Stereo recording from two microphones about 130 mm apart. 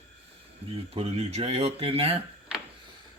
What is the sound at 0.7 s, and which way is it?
Speech, 50° right (ahead or behind).